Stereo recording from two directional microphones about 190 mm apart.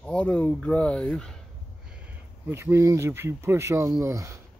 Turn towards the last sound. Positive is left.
turn(degrees=-15)  # may be behind; listen again after turning